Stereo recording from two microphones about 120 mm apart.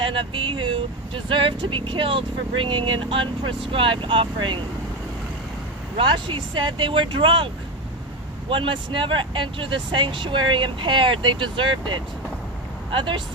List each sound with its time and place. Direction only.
0.0 s speech: 45° right (ahead or behind)
6.0 s speech: 45° right (ahead or behind)